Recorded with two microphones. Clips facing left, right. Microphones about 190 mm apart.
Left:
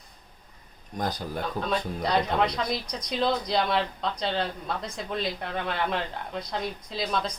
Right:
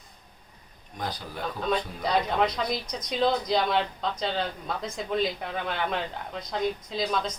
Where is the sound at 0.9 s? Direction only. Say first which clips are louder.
Left 4 dB; 45° left (ahead or behind).